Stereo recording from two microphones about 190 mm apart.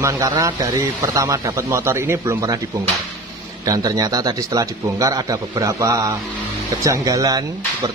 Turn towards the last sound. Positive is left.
turn(degrees=-20)  # may be behind; listen again after turning